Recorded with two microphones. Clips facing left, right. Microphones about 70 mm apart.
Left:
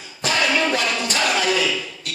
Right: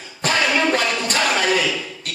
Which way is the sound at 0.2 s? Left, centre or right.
Right.